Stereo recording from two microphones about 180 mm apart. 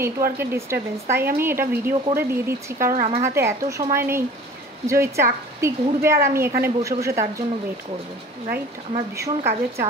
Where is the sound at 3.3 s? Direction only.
15° right (ahead or behind).